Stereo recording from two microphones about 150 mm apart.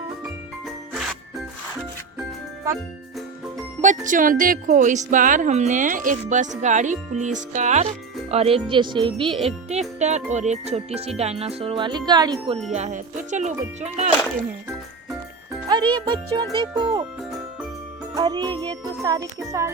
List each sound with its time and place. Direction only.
3.8 s speech: 55° right (ahead or behind); by 9.5 s 35° right (ahead or behind)
9.6 s music: 50° right (ahead or behind)
11.2 s speech: 45° right (ahead or behind)
12.7 s music: 50° right (ahead or behind)
16.0 s speech: 30° right (ahead or behind)
18.1 s music: 25° right (ahead or behind)